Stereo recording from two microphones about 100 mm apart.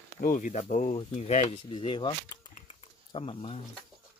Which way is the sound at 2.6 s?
80° left.